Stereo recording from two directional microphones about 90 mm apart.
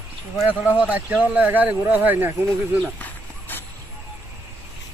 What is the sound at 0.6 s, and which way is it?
Speech, 15° right (ahead or behind).